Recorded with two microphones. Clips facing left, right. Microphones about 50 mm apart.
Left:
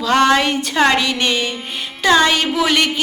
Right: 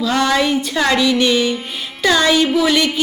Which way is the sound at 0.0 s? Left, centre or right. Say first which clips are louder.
Left 2 dB; left.